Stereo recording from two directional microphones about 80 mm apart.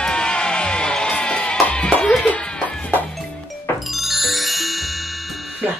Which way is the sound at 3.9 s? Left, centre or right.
Centre.